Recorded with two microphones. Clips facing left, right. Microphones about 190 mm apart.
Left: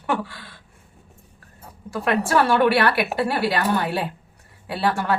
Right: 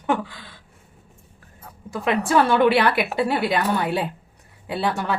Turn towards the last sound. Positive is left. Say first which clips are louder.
# left 1 dB
turn(degrees=-20)  # may be behind; listen again after turning